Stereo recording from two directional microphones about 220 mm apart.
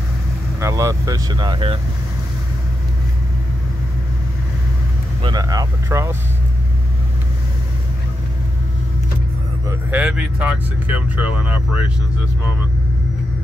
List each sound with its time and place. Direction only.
0.6 s speech: 15° right (ahead or behind)
5.2 s speech: 15° right (ahead or behind)
9.7 s speech: 5° right (ahead or behind)